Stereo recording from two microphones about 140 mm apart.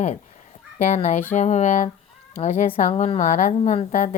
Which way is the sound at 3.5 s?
50° left (ahead or behind).